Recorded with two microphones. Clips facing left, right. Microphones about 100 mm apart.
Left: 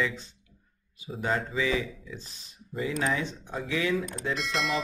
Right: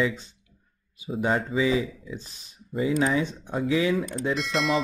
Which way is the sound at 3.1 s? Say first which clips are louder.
Right 6 dB; 5° right (ahead or behind).